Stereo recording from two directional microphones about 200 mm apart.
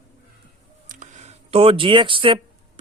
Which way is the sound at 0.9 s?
35° right (ahead or behind).